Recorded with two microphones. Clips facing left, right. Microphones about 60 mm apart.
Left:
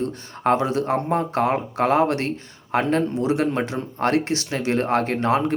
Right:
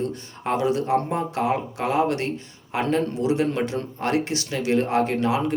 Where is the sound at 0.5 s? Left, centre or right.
Left.